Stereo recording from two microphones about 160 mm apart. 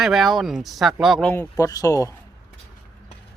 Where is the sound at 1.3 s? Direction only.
20° left (ahead or behind).